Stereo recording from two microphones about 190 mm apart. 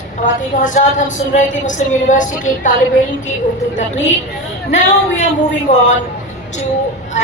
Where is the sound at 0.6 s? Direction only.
40° left (ahead or behind).